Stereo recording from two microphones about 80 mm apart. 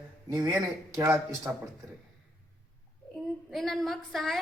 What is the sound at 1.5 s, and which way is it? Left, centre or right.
Speech, right.